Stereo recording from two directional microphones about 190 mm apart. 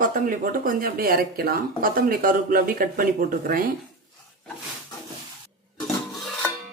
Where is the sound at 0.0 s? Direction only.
45° right (ahead or behind).